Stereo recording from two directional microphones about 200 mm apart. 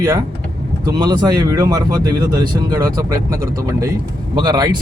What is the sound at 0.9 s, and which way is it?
Speech, 20° right (ahead or behind).